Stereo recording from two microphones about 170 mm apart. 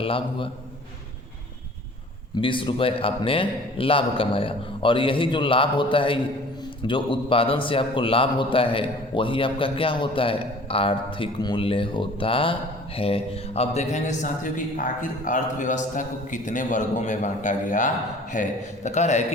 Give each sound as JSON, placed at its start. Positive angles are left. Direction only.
{"t": 0.0, "sound": "a man's voice", "side_deg": 30}
{"t": 2.4, "sound": "a man's voice", "side_deg": 30}